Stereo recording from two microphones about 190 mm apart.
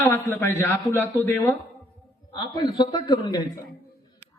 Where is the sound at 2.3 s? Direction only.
25° left (ahead or behind).